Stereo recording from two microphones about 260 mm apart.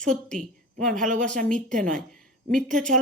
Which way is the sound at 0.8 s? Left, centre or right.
Right.